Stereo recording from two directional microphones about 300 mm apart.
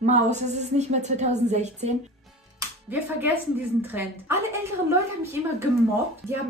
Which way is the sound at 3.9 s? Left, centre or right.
Centre.